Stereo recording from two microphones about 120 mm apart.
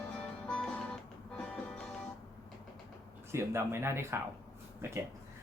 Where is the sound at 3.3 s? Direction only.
20° right (ahead or behind).